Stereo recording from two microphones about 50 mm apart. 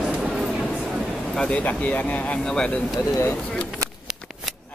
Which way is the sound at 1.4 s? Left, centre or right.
Left.